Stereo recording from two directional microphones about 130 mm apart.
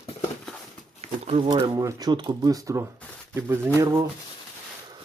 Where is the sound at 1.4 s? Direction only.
35° right (ahead or behind).